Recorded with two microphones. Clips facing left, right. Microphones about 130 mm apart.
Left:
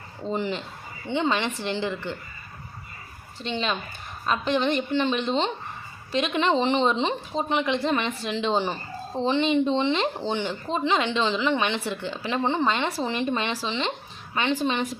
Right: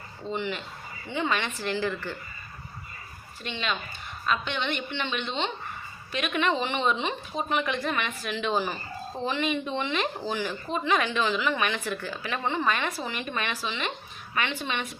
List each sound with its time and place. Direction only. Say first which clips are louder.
0.3 s a woman's voice: left 3 dB; 35° left (ahead or behind)
3.4 s a woman's voice: left 4 dB; 30° left (ahead or behind)